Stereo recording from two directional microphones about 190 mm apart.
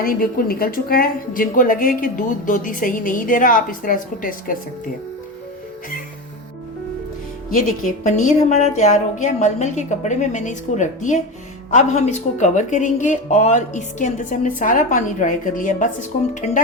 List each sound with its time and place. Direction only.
0.0 s a woman's voice: 50° left (ahead or behind)
7.5 s speech: 40° left (ahead or behind)